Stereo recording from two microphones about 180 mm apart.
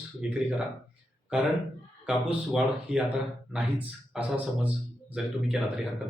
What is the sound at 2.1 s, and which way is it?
Speech, 5° right (ahead or behind).